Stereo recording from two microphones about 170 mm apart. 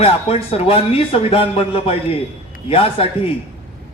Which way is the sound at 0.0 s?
35° left (ahead or behind).